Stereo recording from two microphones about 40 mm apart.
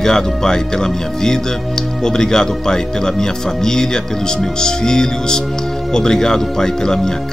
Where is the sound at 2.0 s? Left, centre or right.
Centre.